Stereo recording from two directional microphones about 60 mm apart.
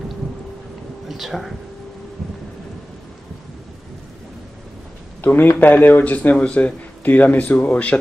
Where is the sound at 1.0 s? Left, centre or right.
Centre.